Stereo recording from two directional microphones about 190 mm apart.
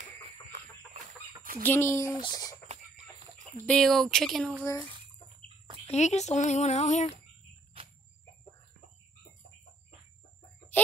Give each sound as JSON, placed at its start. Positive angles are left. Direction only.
{"t": 0.0, "sound": "chicken", "side_deg": -40}
{"t": 1.6, "sound": "speech", "side_deg": 10}
{"t": 3.6, "sound": "speech", "side_deg": 5}
{"t": 5.9, "sound": "speech", "side_deg": 35}